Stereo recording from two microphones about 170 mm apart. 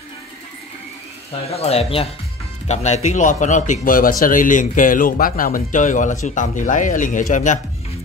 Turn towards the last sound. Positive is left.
turn(degrees=45)  # may be behind; listen again after turning